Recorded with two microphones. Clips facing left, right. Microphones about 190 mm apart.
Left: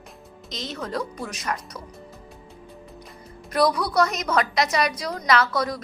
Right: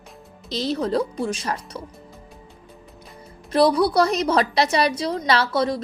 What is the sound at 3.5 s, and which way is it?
A woman's voice, 30° right (ahead or behind).